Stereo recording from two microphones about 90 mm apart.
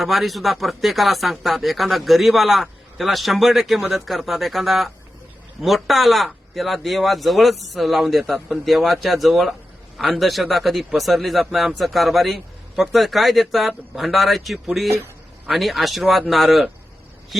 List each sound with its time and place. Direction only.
0.0 s a man's voice: centre (ahead or behind)